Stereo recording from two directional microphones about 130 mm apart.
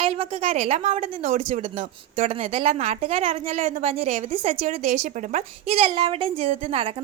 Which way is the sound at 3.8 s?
50° right (ahead or behind).